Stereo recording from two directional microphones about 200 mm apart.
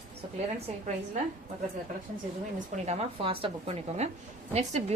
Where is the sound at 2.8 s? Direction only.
30° right (ahead or behind).